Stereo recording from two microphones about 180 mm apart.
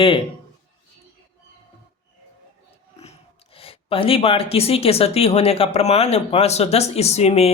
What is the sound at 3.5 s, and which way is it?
Speech, 30° left (ahead or behind).